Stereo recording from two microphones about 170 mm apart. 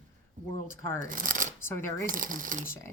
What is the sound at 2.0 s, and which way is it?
Speech, 55° right (ahead or behind).